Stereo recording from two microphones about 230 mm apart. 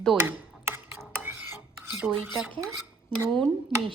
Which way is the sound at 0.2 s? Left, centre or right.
Centre.